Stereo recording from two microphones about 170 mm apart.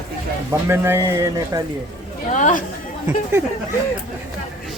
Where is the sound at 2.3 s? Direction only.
45° left (ahead or behind).